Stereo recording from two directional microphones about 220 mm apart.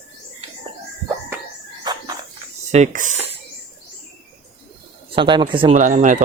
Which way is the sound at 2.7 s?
35° right (ahead or behind).